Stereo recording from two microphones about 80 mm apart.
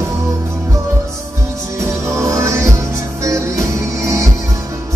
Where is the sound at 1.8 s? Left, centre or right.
Right.